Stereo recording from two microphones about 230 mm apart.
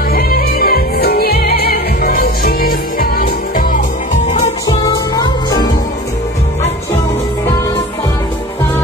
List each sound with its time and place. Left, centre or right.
0.1 s music: left
4.3 s music: centre